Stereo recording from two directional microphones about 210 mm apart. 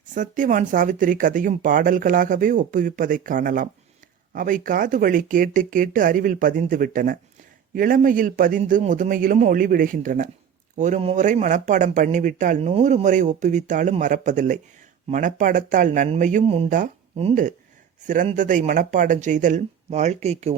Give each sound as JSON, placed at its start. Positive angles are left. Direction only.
{"t": 0.1, "sound": "speech", "side_deg": -40}